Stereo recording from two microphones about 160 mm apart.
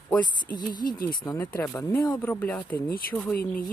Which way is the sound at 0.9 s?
65° left (ahead or behind).